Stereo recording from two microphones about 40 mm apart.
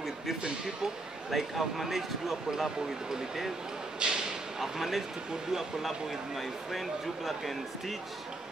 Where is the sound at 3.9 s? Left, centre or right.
Centre.